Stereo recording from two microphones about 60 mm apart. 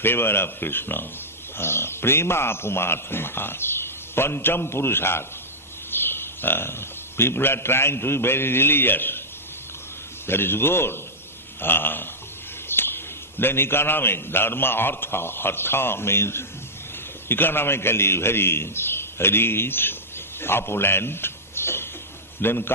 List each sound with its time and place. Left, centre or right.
0.0 s a man's voice: left
10.2 s a man's voice: left